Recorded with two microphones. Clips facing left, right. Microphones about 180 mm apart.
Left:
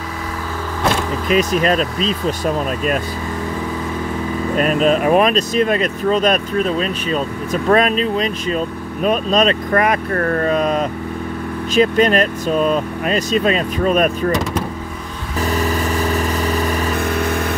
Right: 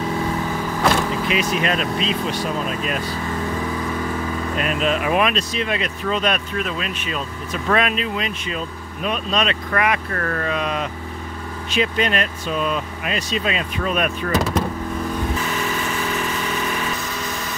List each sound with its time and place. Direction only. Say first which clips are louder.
1.3 s speech: left 8 dB; 40° left (ahead or behind)
4.6 s speech: left 7 dB; 40° left (ahead or behind)
15.4 s vehicle: left 5 dB; 40° left (ahead or behind)
16.9 s vehicle: left 9 dB; 55° left (ahead or behind)